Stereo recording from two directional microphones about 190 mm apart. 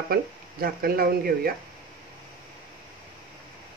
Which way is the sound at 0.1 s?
50° right (ahead or behind).